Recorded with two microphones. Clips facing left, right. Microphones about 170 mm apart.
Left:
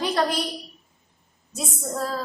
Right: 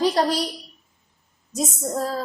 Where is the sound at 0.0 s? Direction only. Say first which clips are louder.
Right 3 dB; 35° right (ahead or behind).